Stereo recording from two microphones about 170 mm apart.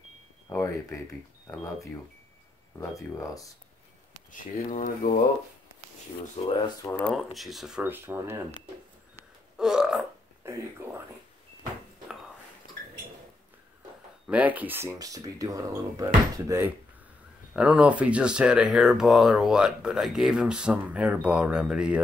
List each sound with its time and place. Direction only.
0.5 s speech: 15° left (ahead or behind)
4.3 s speech: 50° left (ahead or behind)
6.3 s speech: 35° left (ahead or behind)
6.8 s speech: 10° left (ahead or behind); by 8.5 s 15° right (ahead or behind)
9.6 s burping: 5° right (ahead or behind)
10.4 s a sound: 15° right (ahead or behind)
14.2 s speech: 10° right (ahead or behind)